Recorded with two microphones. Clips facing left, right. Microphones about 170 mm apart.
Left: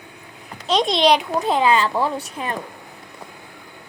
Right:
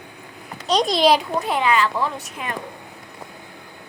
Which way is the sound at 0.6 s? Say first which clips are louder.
Even; centre (ahead or behind).